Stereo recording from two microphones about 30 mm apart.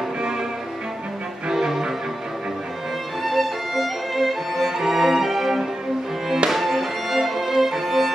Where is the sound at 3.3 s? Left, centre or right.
Centre.